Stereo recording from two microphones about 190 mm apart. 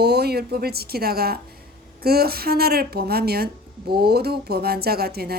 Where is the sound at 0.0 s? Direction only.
55° right (ahead or behind).